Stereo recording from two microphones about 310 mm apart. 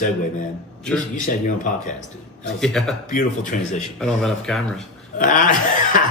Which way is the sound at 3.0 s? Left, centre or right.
Left.